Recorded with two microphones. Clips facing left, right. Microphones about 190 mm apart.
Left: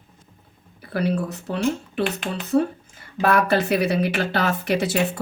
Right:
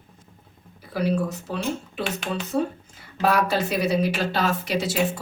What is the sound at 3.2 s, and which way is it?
Speech, 55° left (ahead or behind).